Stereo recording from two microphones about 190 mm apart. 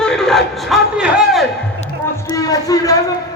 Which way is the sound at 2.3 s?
20° left (ahead or behind).